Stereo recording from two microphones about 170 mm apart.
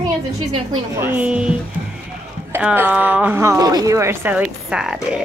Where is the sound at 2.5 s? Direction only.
10° right (ahead or behind).